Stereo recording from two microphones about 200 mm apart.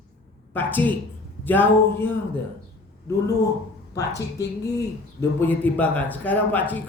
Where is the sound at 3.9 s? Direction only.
15° left (ahead or behind).